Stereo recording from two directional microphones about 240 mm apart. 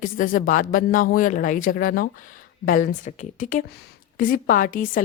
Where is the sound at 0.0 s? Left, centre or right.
Left.